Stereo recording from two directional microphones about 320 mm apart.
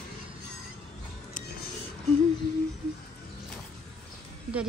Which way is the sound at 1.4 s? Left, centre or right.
Left.